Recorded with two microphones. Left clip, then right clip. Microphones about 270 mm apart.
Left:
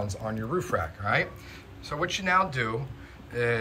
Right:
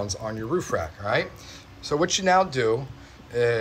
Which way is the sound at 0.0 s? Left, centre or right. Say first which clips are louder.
Right 3 dB; right.